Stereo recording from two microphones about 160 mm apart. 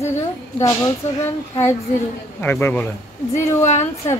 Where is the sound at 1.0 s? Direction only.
45° left (ahead or behind).